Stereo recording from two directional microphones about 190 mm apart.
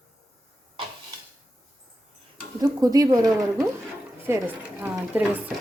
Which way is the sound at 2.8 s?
20° right (ahead or behind).